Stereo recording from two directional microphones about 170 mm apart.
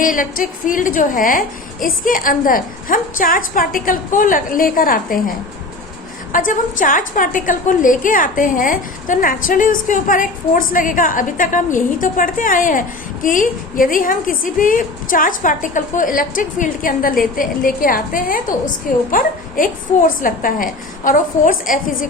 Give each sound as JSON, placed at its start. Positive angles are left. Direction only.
{"t": 0.0, "sound": "a woman's voice", "side_deg": 55}
{"t": 6.3, "sound": "a woman's voice", "side_deg": 50}